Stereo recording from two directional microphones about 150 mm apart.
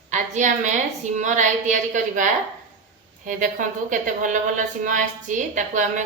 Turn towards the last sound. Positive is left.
turn(degrees=-55)  # may be behind; listen again after turning